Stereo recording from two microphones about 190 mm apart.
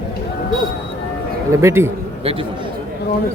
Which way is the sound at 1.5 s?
15° right (ahead or behind).